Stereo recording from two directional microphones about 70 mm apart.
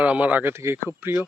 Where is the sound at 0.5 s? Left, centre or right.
Right.